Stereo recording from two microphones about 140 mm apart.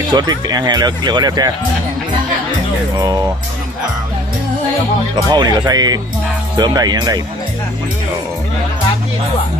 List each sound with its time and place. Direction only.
0.1 s speech: 30° right (ahead or behind)
3.0 s speech: 25° right (ahead or behind)
5.3 s speech: 30° right (ahead or behind)